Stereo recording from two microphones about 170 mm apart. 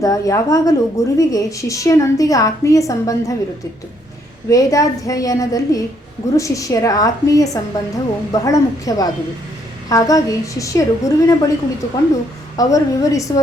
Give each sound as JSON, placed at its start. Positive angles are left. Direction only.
{"t": 0.0, "sound": "a woman's voice", "side_deg": 20}
{"t": 4.4, "sound": "a woman's voice", "side_deg": 20}
{"t": 12.5, "sound": "a woman's voice", "side_deg": 20}